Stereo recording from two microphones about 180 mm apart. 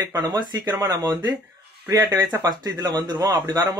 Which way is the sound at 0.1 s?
20° right (ahead or behind).